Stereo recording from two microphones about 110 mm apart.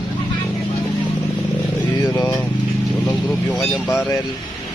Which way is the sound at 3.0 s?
10° left (ahead or behind).